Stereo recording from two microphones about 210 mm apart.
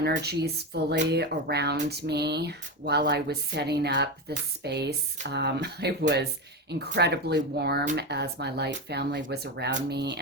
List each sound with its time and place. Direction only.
0.0 s speech: 50° right (ahead or behind)